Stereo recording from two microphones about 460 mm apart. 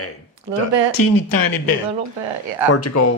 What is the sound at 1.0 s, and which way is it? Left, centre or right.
Speech, left.